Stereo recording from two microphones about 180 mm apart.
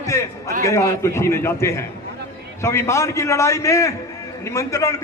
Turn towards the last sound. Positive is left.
turn(degrees=15)  # may be behind; listen again after turning